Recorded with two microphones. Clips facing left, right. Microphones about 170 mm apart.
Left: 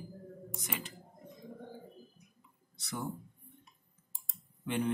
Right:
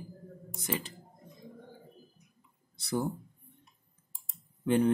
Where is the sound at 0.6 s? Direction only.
30° right (ahead or behind).